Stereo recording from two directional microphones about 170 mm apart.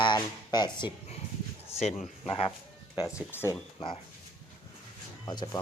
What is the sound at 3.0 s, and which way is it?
Speech, 15° left (ahead or behind).